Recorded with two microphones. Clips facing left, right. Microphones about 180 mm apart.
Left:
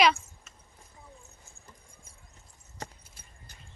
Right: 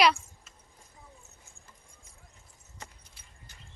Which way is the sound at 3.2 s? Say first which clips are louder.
Left 3 dB; 45° left (ahead or behind).